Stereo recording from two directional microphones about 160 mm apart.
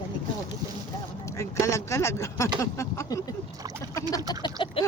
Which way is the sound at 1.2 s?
20° left (ahead or behind).